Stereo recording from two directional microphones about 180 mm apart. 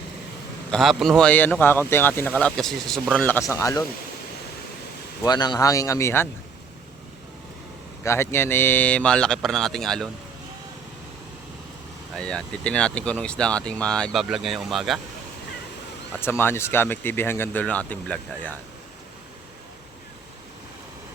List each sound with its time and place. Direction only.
0.7 s speech: centre (ahead or behind); by 3.8 s 20° left (ahead or behind)
5.2 s speech: 25° left (ahead or behind)
8.0 s speech: 15° left (ahead or behind)
12.1 s speech: 5° left (ahead or behind)
16.2 s speech: 10° left (ahead or behind)